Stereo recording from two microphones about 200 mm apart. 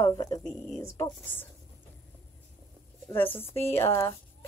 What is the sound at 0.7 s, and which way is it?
Speech, 15° left (ahead or behind).